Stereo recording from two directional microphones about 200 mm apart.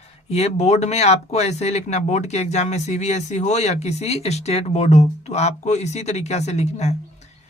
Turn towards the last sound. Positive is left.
turn(degrees=35)  # may be behind; listen again after turning